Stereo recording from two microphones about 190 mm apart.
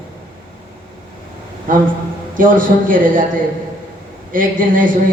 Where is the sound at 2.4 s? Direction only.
45° right (ahead or behind).